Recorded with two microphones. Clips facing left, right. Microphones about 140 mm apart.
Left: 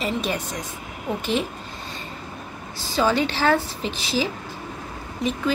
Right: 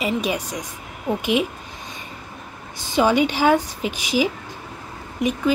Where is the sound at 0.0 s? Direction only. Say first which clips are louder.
Right 2 dB; 10° right (ahead or behind).